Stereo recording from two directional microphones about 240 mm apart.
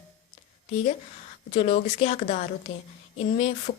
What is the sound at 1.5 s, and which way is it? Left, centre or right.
A woman's voice, left.